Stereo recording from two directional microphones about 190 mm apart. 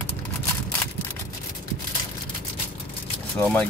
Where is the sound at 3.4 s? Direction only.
10° left (ahead or behind).